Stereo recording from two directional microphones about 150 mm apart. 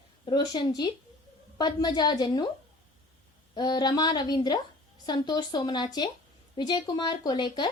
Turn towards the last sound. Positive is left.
turn(degrees=30)  # may be behind; listen again after turning